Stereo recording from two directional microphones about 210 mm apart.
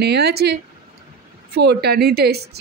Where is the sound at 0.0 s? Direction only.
50° right (ahead or behind).